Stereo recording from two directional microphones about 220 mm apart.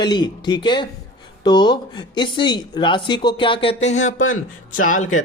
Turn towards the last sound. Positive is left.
turn(degrees=35)  # may be behind; listen again after turning